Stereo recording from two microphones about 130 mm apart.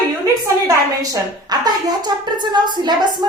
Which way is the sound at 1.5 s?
30° right (ahead or behind).